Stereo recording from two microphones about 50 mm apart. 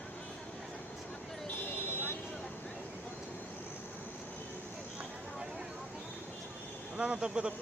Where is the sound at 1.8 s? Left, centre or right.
Left.